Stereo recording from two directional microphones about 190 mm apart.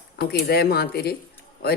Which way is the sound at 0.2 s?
55° left (ahead or behind).